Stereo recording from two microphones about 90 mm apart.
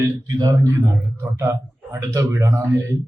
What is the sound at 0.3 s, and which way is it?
Speech, 40° right (ahead or behind).